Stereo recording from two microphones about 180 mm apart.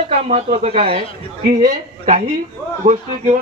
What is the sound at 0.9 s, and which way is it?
A woman's voice, 50° right (ahead or behind).